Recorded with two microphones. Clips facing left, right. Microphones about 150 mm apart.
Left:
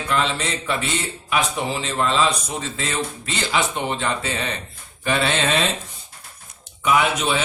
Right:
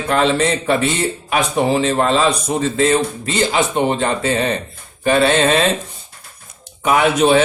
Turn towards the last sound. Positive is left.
turn(degrees=-50)  # may be behind; listen again after turning